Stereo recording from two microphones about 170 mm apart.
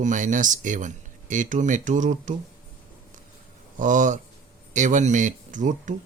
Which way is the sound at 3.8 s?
50° right (ahead or behind).